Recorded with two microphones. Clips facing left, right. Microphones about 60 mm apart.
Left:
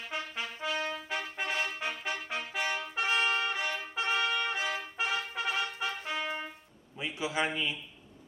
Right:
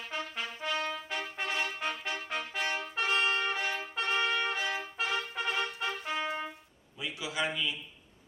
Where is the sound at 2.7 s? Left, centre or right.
Centre.